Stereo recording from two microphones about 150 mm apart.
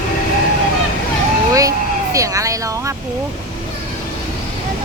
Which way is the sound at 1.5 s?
20° right (ahead or behind).